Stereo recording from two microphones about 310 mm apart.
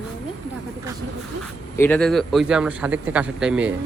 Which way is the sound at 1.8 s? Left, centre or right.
Centre.